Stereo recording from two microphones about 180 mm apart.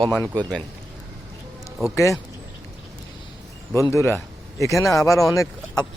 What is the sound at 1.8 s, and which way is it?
Speech, 15° left (ahead or behind).